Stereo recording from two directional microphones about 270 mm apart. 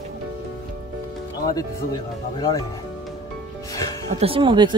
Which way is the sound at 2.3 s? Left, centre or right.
Centre.